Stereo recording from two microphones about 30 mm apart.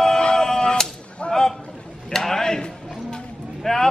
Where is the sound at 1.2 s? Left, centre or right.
Left.